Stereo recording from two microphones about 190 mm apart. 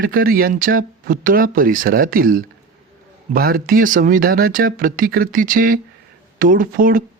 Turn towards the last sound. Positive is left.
turn(degrees=-45)  # may be behind; listen again after turning